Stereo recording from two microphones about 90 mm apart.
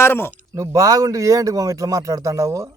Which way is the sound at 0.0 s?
25° left (ahead or behind).